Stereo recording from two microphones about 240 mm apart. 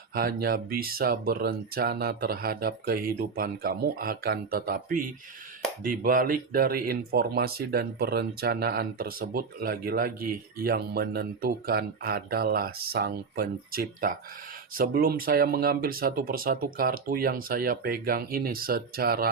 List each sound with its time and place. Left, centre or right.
0.1 s speech: right